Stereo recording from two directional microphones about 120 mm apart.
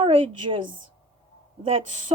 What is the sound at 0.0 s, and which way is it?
Speech, 50° right (ahead or behind).